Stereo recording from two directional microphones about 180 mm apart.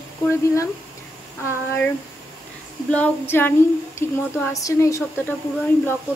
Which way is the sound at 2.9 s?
10° left (ahead or behind).